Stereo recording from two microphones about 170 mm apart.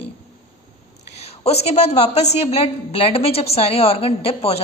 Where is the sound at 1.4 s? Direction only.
40° left (ahead or behind).